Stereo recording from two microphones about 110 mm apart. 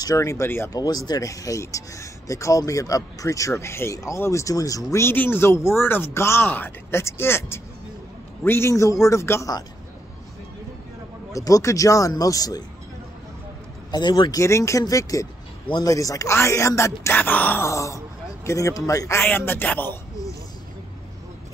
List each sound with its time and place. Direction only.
0.0 s speech: 30° left (ahead or behind)
0.7 s speech: 35° left (ahead or behind)
11.3 s speech: 30° left (ahead or behind)
13.9 s speech: 40° left (ahead or behind); by 20.0 s 15° left (ahead or behind)